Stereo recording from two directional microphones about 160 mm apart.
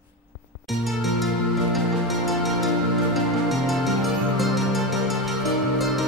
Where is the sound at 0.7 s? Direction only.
Centre (ahead or behind).